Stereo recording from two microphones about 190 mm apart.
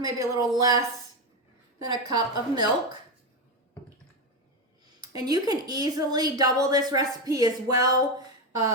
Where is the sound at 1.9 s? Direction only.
20° right (ahead or behind).